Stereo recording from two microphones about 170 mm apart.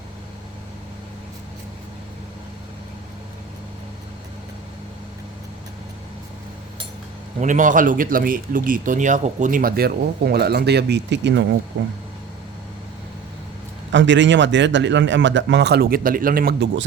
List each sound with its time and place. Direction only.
7.4 s speech: 50° right (ahead or behind); by 11.4 s 90° right
13.9 s a man's voice: 90° right; by 16.8 s 75° right (ahead or behind)